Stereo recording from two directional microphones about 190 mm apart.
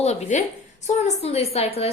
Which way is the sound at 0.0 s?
35° left (ahead or behind).